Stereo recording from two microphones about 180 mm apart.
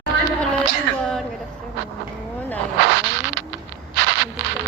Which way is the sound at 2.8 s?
90° right.